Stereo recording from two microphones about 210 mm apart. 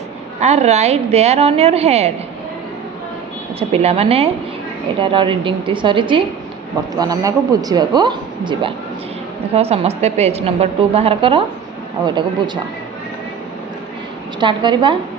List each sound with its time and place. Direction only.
0.3 s a woman's voice: 30° right (ahead or behind)
3.6 s a woman's voice: 30° right (ahead or behind)
14.3 s a woman's voice: 20° right (ahead or behind)